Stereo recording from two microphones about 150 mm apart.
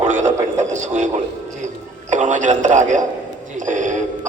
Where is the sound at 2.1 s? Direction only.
55° right (ahead or behind).